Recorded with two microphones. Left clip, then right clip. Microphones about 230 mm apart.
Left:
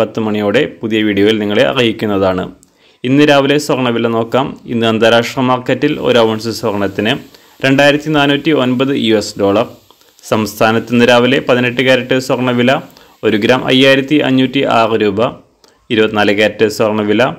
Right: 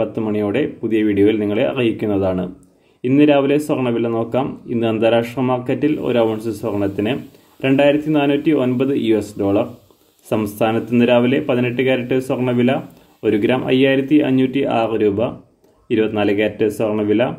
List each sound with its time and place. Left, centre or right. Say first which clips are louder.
0.0 s speech: left 5 dB; left